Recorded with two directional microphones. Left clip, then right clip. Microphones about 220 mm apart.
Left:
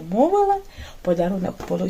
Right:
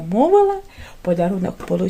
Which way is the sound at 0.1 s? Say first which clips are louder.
Right 3 dB; 45° right (ahead or behind).